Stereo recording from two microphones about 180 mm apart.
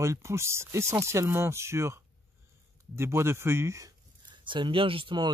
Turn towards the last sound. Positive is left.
turn(degrees=-25)  # may be behind; listen again after turning